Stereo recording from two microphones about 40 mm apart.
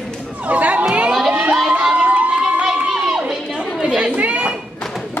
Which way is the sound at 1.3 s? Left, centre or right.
Right.